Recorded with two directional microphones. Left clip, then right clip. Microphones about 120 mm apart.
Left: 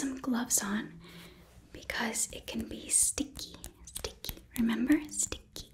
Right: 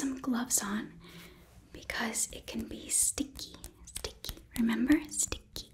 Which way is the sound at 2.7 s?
Centre (ahead or behind).